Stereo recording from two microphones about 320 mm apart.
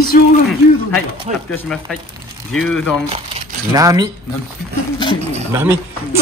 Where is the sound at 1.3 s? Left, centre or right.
Right.